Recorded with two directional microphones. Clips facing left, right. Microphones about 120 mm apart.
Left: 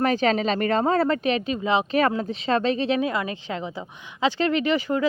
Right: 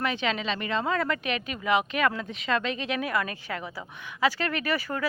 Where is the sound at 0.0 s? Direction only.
40° left (ahead or behind).